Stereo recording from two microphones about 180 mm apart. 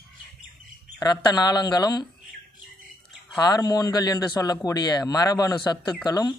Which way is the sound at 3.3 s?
20° left (ahead or behind).